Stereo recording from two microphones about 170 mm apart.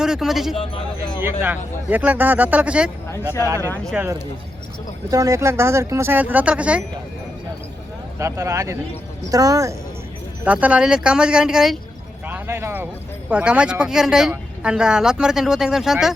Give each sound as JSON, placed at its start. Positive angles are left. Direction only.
{"t": 0.0, "sound": "speech", "side_deg": -5}
{"t": 3.9, "sound": "speech", "side_deg": -15}
{"t": 8.2, "sound": "speech", "side_deg": -20}
{"t": 10.4, "sound": "speech", "side_deg": -10}
{"t": 12.3, "sound": "speech", "side_deg": -15}